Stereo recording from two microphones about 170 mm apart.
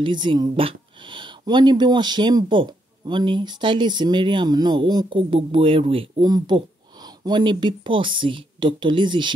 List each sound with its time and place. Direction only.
0.0 s speech: 25° right (ahead or behind)